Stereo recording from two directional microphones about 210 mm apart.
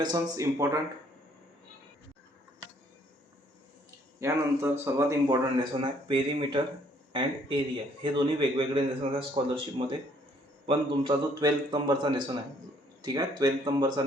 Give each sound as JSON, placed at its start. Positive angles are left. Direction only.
{"t": 0.0, "sound": "speech", "side_deg": -15}
{"t": 4.2, "sound": "speech", "side_deg": -10}